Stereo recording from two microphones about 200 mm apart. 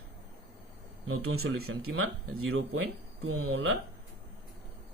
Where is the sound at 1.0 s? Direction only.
90° right.